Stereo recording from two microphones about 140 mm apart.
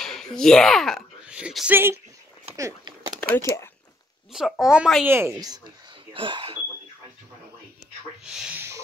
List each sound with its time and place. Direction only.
0.0 s speech: 5° left (ahead or behind)
2.5 s speech: 25° right (ahead or behind)
3.2 s a sound: 10° left (ahead or behind)
4.3 s speech: centre (ahead or behind)
5.0 s speech: 15° right (ahead or behind)
6.1 s speech: 35° right (ahead or behind)
8.3 s speech: 5° right (ahead or behind)